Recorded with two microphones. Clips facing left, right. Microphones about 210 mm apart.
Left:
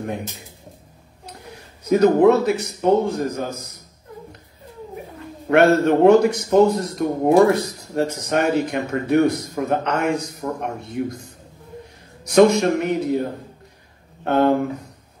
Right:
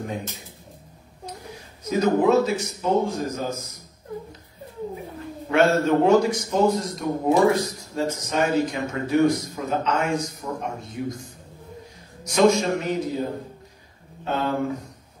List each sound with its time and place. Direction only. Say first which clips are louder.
1.9 s speech: left 5 dB; 60° left (ahead or behind)
5.5 s speech: left 4 dB; 65° left (ahead or behind)
12.3 s speech: left 5 dB; 65° left (ahead or behind)
14.2 s speech: left 9 dB; 60° left (ahead or behind)